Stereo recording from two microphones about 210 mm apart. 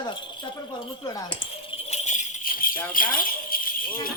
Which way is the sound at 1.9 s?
35° left (ahead or behind).